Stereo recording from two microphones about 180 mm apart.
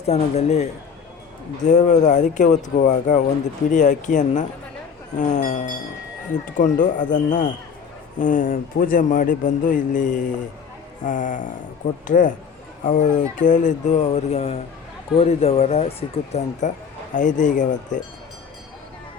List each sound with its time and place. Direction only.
0.0 s speech: 40° left (ahead or behind)